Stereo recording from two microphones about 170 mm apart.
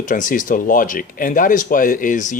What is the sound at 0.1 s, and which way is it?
Speech, 50° left (ahead or behind).